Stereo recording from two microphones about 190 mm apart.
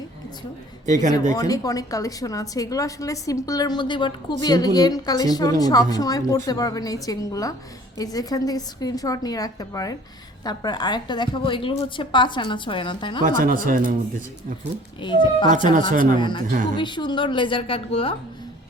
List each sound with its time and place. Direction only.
1.3 s a woman's voice: 20° left (ahead or behind)
13.2 s speech: 45° right (ahead or behind)
15.0 s a woman's voice: 25° left (ahead or behind)
15.9 s speech: 45° right (ahead or behind)
16.1 s a woman's voice: 25° left (ahead or behind)